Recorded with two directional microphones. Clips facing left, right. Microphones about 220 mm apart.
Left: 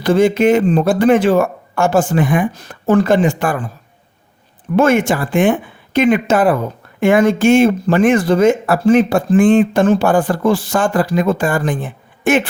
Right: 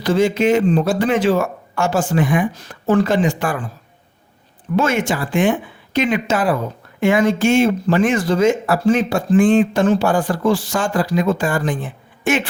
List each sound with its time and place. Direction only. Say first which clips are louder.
0.0 s speech: left 4 dB; 55° left (ahead or behind)
4.8 s speech: left 6 dB; 55° left (ahead or behind)